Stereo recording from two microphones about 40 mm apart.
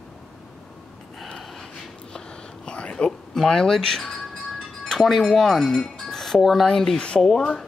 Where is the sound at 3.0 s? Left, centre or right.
Centre.